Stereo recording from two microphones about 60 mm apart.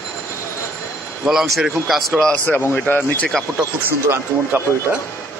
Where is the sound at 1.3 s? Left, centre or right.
Centre.